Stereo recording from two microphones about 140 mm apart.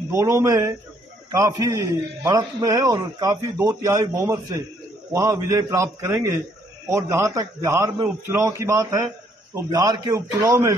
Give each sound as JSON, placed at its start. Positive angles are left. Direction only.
{"t": 0.1, "sound": "a man's voice", "side_deg": -20}